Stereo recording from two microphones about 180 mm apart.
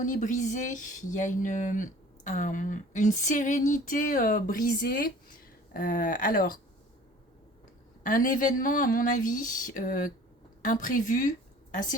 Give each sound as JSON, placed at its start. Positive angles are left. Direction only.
{"t": 0.0, "sound": "speech", "side_deg": 45}
{"t": 8.0, "sound": "speech", "side_deg": 50}